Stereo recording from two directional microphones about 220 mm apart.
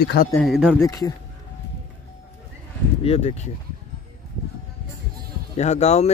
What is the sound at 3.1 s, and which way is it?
Speech, 30° left (ahead or behind).